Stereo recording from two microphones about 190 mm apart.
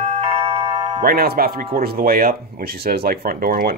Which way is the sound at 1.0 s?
55° right (ahead or behind).